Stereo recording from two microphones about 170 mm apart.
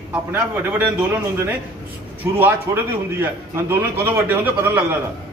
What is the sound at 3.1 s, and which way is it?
A man's voice, 15° right (ahead or behind).